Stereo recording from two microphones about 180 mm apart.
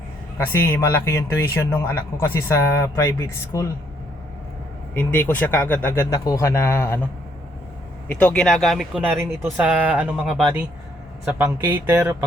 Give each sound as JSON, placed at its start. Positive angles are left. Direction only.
{"t": 0.3, "sound": "speech", "side_deg": 10}
{"t": 4.9, "sound": "speech", "side_deg": 10}
{"t": 8.0, "sound": "speech", "side_deg": 10}